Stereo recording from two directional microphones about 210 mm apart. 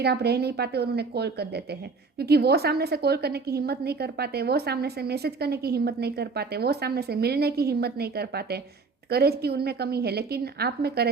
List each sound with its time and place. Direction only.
0.0 s a woman's voice: 50° right (ahead or behind)